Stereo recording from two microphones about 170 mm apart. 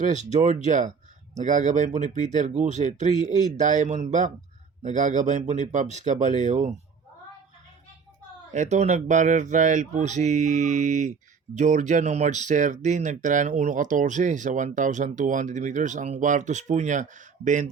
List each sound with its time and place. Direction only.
0.0 s speech: 45° right (ahead or behind)
8.5 s speech: 45° right (ahead or behind)